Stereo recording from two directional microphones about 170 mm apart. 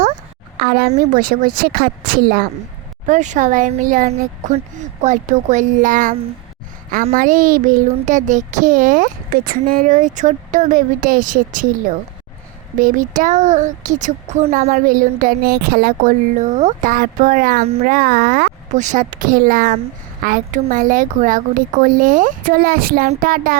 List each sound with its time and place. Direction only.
0.6 s speech: 65° right (ahead or behind)
3.1 s speech: 45° right (ahead or behind)
12.8 s speech: 50° right (ahead or behind)
18.7 s speech: 45° right (ahead or behind)